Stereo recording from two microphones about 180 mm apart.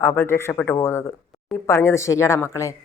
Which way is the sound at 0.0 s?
15° left (ahead or behind).